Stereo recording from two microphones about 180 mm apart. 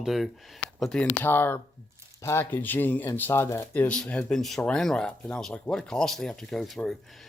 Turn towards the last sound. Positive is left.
turn(degrees=0)  # may be behind; listen again after turning